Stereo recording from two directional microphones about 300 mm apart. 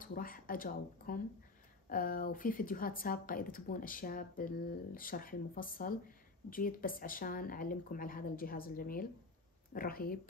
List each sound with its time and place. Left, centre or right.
0.0 s a woman's voice: left